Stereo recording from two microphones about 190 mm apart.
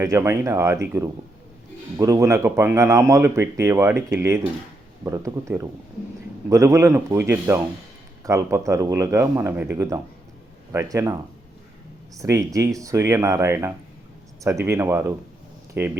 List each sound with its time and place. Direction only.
0.0 s speech: 15° right (ahead or behind)
2.0 s speech: 15° right (ahead or behind)